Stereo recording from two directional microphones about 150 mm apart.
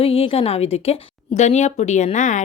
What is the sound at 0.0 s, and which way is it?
Speech, 40° left (ahead or behind).